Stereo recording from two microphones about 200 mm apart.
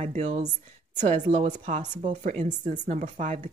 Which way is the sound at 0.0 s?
30° right (ahead or behind).